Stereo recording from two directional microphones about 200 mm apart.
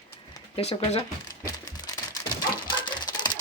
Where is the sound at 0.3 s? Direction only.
30° left (ahead or behind).